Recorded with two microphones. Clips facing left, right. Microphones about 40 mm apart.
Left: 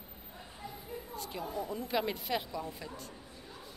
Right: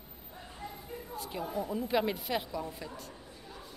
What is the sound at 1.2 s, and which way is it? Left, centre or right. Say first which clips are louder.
A woman's voice: right 3 dB; centre.